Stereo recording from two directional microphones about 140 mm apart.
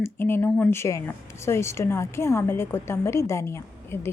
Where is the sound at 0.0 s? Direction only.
15° left (ahead or behind).